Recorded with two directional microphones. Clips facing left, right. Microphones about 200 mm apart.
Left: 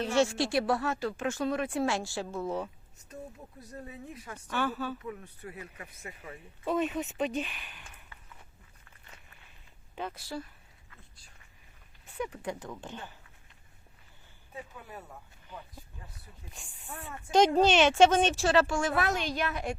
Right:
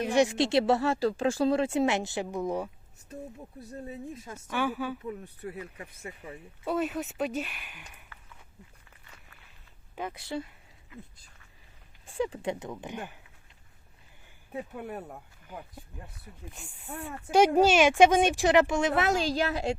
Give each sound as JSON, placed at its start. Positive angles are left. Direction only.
{"t": 0.0, "sound": "speech", "side_deg": -15}
{"t": 3.6, "sound": "speech", "side_deg": -30}
{"t": 4.3, "sound": "a woman's voice", "side_deg": -10}
{"t": 5.0, "sound": "speech", "side_deg": -30}
{"t": 6.7, "sound": "speech", "side_deg": 0}
{"t": 9.9, "sound": "speech", "side_deg": -10}
{"t": 10.2, "sound": "speech", "side_deg": -20}
{"t": 12.1, "sound": "speech", "side_deg": -30}
{"t": 14.5, "sound": "speech", "side_deg": -60}
{"t": 15.9, "sound": "a woman's voice", "side_deg": -15}